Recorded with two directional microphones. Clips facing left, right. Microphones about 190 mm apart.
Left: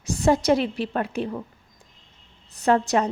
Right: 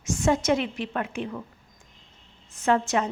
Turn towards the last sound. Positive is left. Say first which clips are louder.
# left 3 dB
turn(degrees=40)  # may be behind; listen again after turning